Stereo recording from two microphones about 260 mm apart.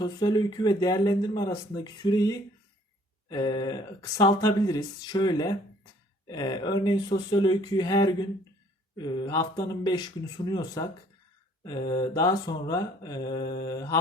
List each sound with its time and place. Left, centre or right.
0.0 s speech: centre